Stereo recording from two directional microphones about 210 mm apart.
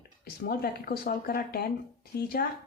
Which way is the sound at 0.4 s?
45° left (ahead or behind).